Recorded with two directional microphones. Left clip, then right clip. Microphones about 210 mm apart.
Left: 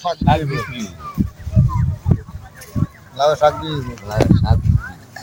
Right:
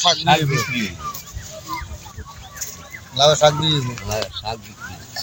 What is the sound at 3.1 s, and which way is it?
Speech, 5° right (ahead or behind).